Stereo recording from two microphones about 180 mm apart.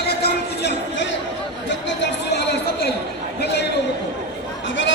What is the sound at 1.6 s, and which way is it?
Chatter, 75° left (ahead or behind).